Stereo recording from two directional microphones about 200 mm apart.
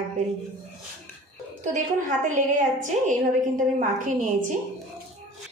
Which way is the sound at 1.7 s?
40° right (ahead or behind).